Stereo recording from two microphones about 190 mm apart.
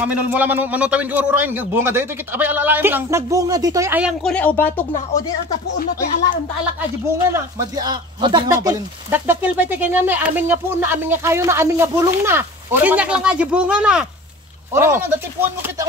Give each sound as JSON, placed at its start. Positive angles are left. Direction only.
{"t": 0.0, "sound": "speech", "side_deg": -10}
{"t": 4.0, "sound": "speech", "side_deg": 5}
{"t": 7.2, "sound": "speech", "side_deg": -15}
{"t": 9.1, "sound": "speech", "side_deg": -10}